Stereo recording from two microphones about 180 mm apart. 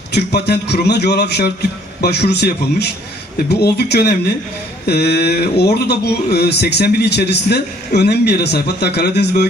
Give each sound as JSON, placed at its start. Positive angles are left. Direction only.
{"t": 0.1, "sound": "a man's voice", "side_deg": 65}